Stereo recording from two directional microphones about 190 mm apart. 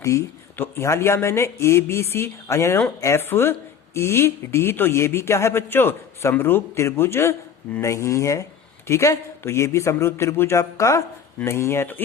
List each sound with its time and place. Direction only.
0.0 s speech: 15° left (ahead or behind)